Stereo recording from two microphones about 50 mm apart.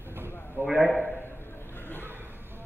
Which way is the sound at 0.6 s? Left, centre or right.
Right.